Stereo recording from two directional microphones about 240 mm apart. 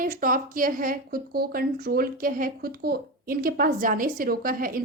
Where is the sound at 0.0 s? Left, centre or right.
Right.